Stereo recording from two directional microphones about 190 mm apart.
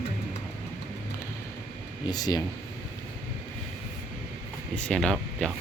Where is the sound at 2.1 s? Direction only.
20° left (ahead or behind).